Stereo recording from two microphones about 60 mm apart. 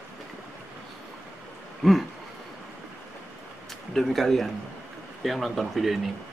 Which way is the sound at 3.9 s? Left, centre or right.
Centre.